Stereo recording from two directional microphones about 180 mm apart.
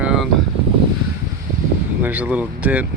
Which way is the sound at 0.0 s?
5° right (ahead or behind).